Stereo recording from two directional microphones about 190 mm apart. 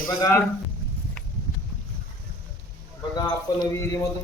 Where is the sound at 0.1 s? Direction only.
20° left (ahead or behind).